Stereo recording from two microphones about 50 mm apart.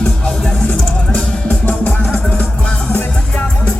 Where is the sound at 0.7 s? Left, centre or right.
Left.